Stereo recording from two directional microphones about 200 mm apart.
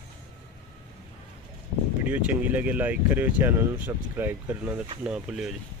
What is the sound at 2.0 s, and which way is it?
Speech, 5° right (ahead or behind).